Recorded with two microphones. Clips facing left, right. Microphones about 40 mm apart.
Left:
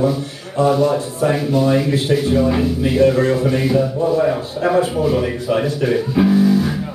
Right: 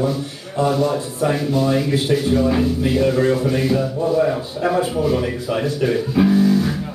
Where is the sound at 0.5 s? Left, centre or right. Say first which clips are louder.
Left 3 dB; centre.